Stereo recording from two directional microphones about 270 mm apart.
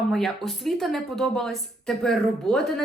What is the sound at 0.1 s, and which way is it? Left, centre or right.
Speech, centre.